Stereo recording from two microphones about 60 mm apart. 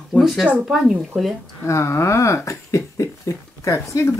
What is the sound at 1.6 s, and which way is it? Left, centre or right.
Speech, left.